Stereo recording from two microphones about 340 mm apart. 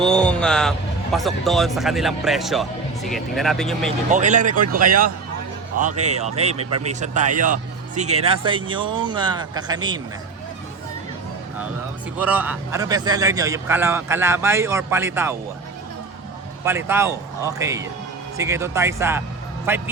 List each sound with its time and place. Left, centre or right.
0.0 s speech: centre
4.1 s speech: right
6.0 s a man's voice: centre
12.1 s a man's voice: centre
16.6 s a man's voice: centre